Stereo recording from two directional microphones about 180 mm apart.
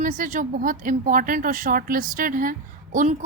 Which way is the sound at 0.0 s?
45° right (ahead or behind).